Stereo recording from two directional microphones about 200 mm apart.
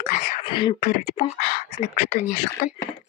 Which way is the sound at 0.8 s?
40° left (ahead or behind).